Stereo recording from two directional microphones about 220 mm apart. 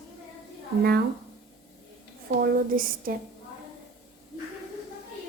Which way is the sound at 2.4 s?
40° right (ahead or behind).